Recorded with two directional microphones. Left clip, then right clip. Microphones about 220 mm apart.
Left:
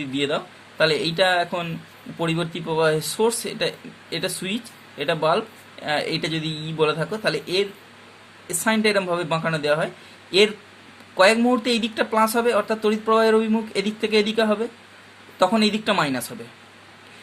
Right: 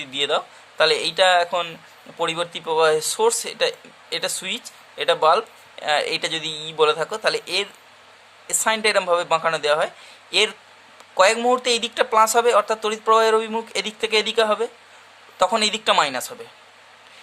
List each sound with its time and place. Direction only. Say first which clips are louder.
0.0 s speech: right 2 dB; 25° right (ahead or behind)
11.2 s speech: even; 25° right (ahead or behind)